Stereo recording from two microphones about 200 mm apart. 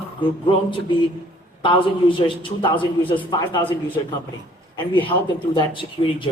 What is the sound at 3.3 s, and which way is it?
Speech, 25° left (ahead or behind).